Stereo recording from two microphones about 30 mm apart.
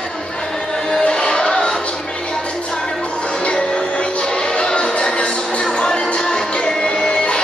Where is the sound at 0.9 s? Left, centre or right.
Left.